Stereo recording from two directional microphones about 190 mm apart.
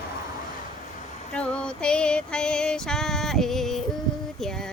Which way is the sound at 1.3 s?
5° left (ahead or behind).